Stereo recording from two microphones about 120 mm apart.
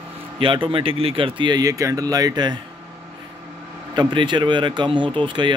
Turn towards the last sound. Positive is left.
turn(degrees=-40)  # may be behind; listen again after turning